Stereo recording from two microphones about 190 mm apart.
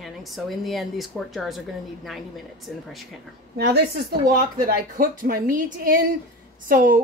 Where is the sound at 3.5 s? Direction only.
60° right (ahead or behind).